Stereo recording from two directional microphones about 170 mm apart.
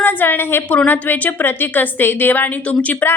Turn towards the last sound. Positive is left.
turn(degrees=10)  # may be behind; listen again after turning